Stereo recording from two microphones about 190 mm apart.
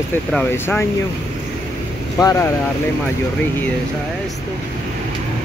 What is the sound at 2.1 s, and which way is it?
Speech, 15° left (ahead or behind).